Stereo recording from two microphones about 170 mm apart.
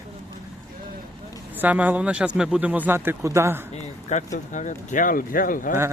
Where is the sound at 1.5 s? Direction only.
10° right (ahead or behind).